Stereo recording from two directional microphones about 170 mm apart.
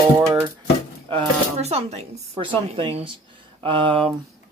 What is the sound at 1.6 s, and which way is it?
Speech, 40° right (ahead or behind).